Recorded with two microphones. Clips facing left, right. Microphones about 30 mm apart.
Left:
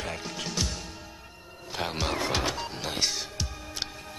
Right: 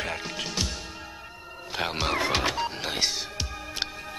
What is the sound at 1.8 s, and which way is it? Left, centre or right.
Music, centre.